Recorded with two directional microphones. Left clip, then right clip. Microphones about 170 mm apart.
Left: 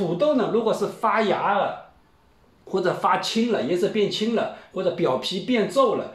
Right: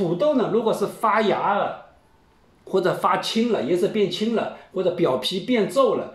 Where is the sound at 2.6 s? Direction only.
30° right (ahead or behind).